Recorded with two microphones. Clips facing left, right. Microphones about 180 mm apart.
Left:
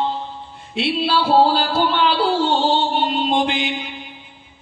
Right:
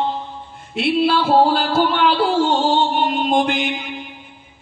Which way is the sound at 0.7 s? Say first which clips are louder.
Right 3 dB; 50° right (ahead or behind).